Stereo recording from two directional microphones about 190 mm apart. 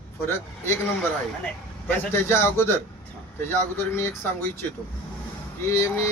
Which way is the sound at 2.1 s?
10° left (ahead or behind).